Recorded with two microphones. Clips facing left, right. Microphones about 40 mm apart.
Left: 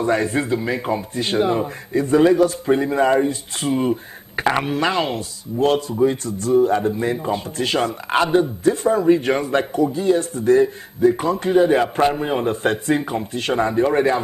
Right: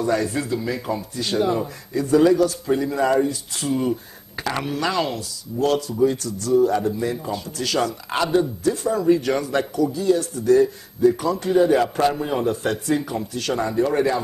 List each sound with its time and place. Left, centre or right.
0.0 s speech: left